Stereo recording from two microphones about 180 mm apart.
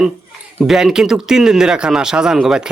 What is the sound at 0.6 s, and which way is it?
Speech, centre (ahead or behind).